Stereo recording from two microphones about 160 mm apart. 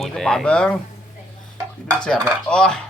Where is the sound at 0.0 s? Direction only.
5° left (ahead or behind).